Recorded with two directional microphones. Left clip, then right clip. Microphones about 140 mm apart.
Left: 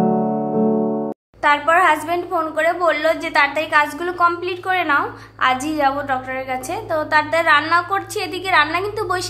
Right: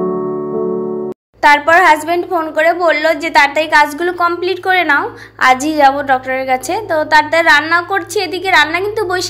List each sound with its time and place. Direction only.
1.4 s a woman's voice: 35° right (ahead or behind)